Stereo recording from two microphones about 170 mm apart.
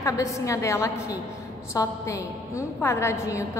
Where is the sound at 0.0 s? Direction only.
20° left (ahead or behind).